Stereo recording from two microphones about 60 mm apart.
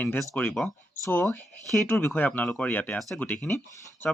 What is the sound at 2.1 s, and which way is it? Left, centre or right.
Speech, left.